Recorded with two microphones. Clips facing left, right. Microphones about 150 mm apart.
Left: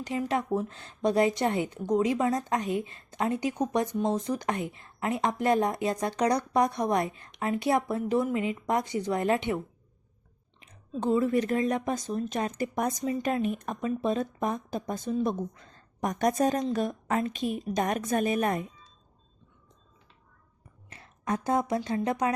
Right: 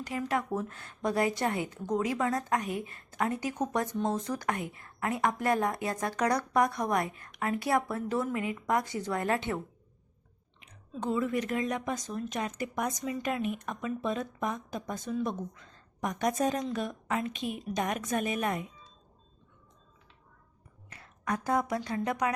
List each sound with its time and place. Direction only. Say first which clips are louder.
0.0 s a woman's voice: left 3 dB; 20° left (ahead or behind)
10.6 s speech: left 5 dB; 30° left (ahead or behind)
20.9 s speech: left 3 dB; 25° left (ahead or behind)